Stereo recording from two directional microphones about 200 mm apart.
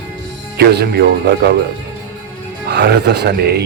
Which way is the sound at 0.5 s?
55° right (ahead or behind).